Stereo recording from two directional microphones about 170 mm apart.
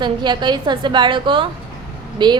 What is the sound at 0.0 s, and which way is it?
A woman's voice, 25° right (ahead or behind).